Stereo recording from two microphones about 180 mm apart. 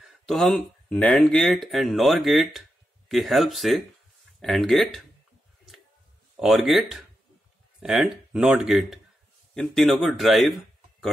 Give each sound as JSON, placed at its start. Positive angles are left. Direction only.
{"t": 0.3, "sound": "speech", "side_deg": 0}
{"t": 6.3, "sound": "speech", "side_deg": 0}